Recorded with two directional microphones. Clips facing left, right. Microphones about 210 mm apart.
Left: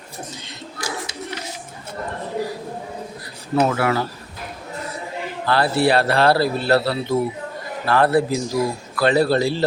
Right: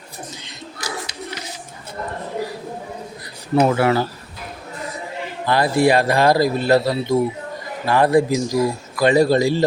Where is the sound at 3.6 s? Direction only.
20° right (ahead or behind).